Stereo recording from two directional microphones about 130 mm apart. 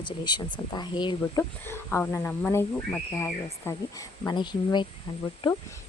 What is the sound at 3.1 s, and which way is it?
Speech, 20° left (ahead or behind).